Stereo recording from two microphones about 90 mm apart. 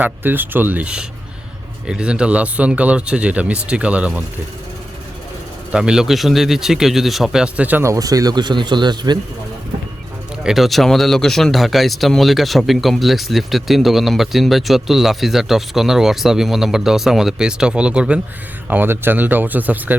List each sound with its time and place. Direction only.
0.0 s speech: 20° right (ahead or behind)
5.7 s speech: 10° right (ahead or behind)
7.8 s speech: 35° right (ahead or behind); by 9.1 s 55° right (ahead or behind)
10.4 s speech: 5° right (ahead or behind)
18.7 s speech: 25° right (ahead or behind)